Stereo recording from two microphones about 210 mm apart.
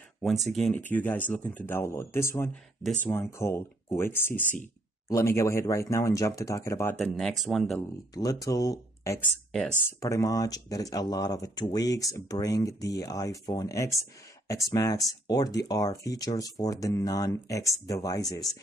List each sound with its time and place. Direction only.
0.5 s speech: centre (ahead or behind)
7.0 s speech: centre (ahead or behind)
8.1 s speech: 15° left (ahead or behind)